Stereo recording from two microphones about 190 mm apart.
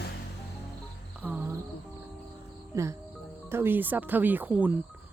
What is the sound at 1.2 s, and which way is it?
Music, 10° right (ahead or behind).